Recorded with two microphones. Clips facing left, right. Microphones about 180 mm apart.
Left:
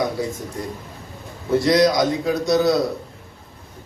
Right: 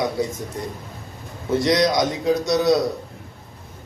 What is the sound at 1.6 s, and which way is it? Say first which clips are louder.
A man's voice: left 2 dB; 20° right (ahead or behind).